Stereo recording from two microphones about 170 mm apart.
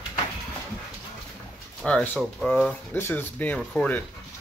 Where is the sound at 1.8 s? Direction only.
10° left (ahead or behind).